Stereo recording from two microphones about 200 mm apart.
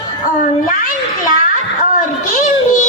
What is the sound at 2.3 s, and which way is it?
Music, 40° left (ahead or behind).